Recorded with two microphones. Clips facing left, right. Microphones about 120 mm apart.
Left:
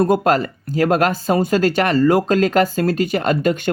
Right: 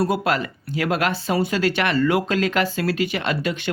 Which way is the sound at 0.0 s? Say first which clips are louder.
Left 6 dB; 45° left (ahead or behind).